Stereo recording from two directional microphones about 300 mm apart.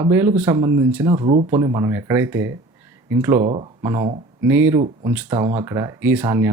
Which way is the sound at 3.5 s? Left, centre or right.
Centre.